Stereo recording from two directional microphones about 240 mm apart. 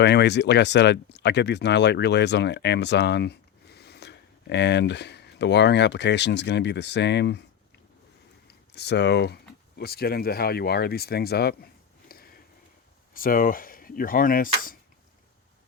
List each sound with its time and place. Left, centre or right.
0.0 s speech: left
8.4 s speech: left